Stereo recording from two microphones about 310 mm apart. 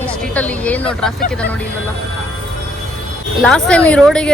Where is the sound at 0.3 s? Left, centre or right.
Centre.